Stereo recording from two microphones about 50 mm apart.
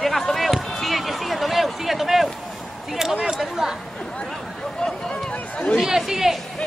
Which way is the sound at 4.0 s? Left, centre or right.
Centre.